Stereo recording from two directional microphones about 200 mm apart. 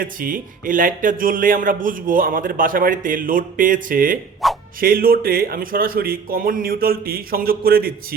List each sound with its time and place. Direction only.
0.0 s speech: 45° right (ahead or behind)
4.4 s music: centre (ahead or behind)
4.8 s speech: 45° right (ahead or behind)